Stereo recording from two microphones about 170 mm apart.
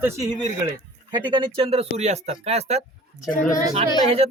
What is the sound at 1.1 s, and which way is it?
Speech, 30° right (ahead or behind).